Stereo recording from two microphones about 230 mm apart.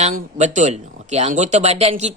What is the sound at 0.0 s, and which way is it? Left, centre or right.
Speech, right.